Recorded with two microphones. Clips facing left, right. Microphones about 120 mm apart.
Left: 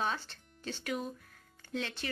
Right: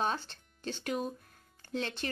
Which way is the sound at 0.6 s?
30° right (ahead or behind).